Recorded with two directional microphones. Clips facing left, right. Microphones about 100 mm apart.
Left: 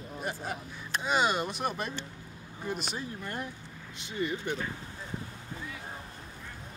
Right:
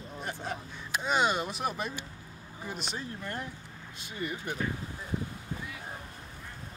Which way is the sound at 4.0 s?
25° left (ahead or behind).